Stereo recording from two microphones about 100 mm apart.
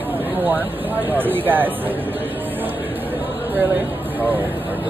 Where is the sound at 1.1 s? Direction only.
20° right (ahead or behind).